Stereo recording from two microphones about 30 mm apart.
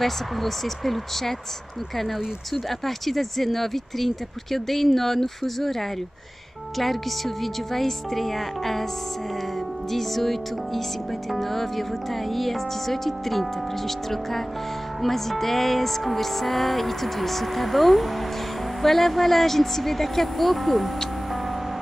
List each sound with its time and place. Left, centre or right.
0.0 s music: centre
2.8 s speech: centre
6.8 s music: centre
9.8 s music: centre
11.2 s speech: centre
15.0 s music: centre